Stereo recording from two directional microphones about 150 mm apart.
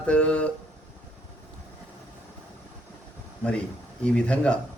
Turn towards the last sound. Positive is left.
turn(degrees=5)  # may be behind; listen again after turning